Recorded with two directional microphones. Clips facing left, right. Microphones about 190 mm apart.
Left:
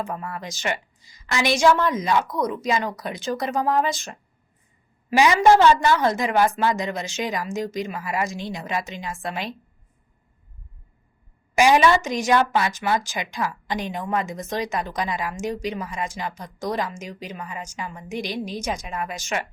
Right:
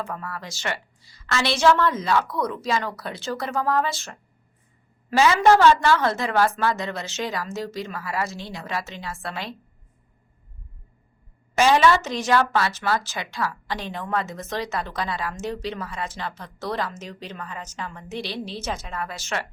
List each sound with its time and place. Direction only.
0.0 s speech: 20° left (ahead or behind)
11.5 s speech: 15° left (ahead or behind)